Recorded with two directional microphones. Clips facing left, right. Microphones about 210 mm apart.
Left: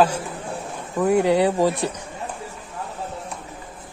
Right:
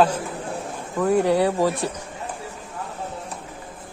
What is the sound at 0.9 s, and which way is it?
Speech, 15° left (ahead or behind).